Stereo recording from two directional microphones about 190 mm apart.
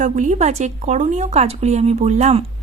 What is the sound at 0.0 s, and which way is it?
Speech, 40° right (ahead or behind).